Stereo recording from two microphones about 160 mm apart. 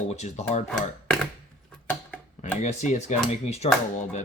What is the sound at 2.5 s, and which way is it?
Speech, 45° left (ahead or behind).